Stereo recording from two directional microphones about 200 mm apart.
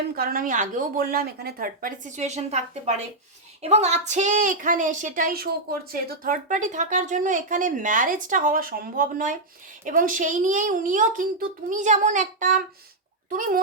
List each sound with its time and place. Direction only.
0.2 s a woman's voice: 45° right (ahead or behind)